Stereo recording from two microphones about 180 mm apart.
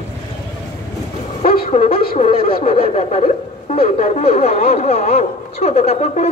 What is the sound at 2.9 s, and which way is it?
Speech, 35° left (ahead or behind).